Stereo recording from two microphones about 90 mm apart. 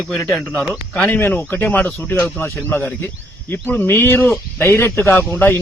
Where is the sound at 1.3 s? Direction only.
20° left (ahead or behind).